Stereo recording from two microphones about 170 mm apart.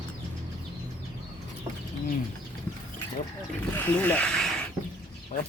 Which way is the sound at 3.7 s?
10° left (ahead or behind).